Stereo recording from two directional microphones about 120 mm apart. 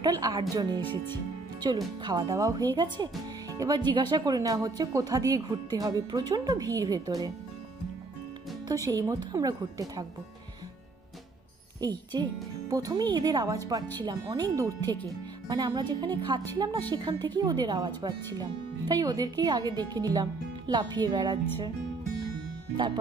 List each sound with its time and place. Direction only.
0.0 s speech: 30° right (ahead or behind)
8.6 s speech: 30° right (ahead or behind)
11.8 s speech: 35° right (ahead or behind)